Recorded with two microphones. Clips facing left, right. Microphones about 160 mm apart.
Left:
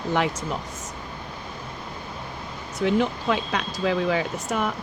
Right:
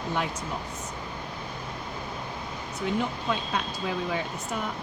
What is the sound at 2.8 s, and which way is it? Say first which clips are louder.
Speech: left 7 dB; 90° left.